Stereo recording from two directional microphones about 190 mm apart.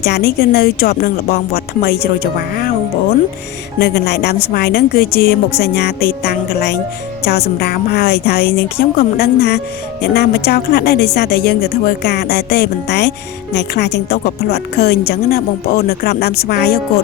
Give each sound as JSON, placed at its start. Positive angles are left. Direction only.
{"t": 0.0, "sound": "a woman's voice", "side_deg": 55}
{"t": 3.8, "sound": "a woman's voice", "side_deg": 60}